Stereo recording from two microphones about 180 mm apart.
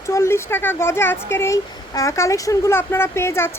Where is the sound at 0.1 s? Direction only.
15° left (ahead or behind).